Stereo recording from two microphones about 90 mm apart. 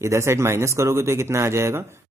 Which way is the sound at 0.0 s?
30° right (ahead or behind).